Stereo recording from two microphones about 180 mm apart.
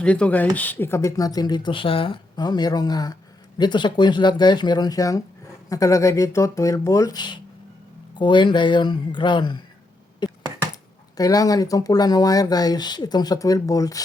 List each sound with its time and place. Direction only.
0.0 s speech: 5° left (ahead or behind); by 9.6 s 25° left (ahead or behind)
10.2 s a sound: 25° left (ahead or behind)
11.2 s speech: 20° left (ahead or behind)